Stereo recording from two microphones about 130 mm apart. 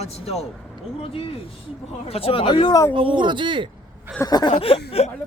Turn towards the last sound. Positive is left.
turn(degrees=50)  # may be behind; listen again after turning